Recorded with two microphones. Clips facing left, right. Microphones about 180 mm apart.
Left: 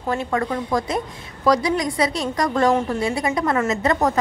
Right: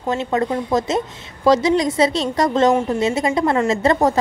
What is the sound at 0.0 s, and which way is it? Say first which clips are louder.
A woman's voice: right 3 dB; 25° right (ahead or behind).